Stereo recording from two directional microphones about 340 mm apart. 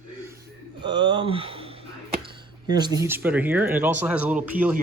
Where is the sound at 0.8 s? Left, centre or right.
Centre.